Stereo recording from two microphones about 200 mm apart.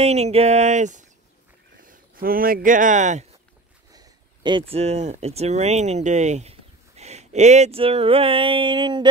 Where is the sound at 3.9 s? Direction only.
25° right (ahead or behind).